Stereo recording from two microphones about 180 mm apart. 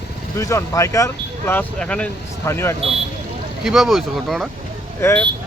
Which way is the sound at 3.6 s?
Centre (ahead or behind).